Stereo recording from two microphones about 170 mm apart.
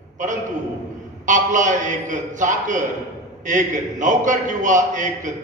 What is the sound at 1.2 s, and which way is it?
A man's voice, 50° right (ahead or behind).